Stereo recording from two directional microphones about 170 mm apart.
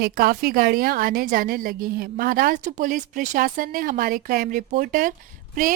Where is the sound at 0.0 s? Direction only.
60° right (ahead or behind).